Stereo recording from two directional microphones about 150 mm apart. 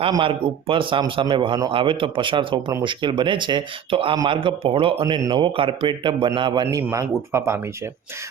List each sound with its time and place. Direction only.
0.1 s speech: 35° right (ahead or behind); by 7.6 s 20° right (ahead or behind)